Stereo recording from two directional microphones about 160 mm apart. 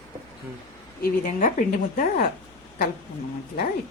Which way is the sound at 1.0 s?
60° left (ahead or behind).